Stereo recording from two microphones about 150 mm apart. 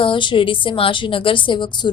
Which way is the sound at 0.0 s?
35° left (ahead or behind).